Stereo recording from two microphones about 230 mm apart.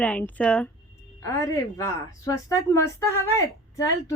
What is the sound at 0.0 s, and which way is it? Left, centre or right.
Speech, centre.